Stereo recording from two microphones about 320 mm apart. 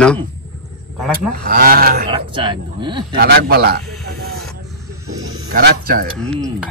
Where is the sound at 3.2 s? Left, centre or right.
Right.